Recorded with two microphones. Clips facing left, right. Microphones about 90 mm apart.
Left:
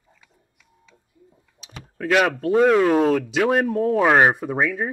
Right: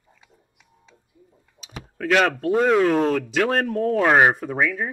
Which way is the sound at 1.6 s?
5° right (ahead or behind).